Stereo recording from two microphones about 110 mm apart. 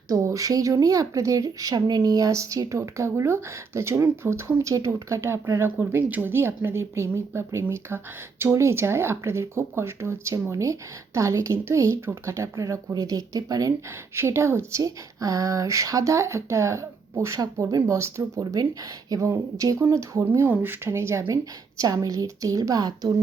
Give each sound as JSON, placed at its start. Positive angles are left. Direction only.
{"t": 0.1, "sound": "a woman's voice", "side_deg": -30}